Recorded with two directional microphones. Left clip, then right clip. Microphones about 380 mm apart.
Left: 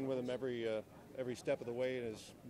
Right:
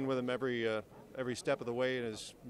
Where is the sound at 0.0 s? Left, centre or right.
Right.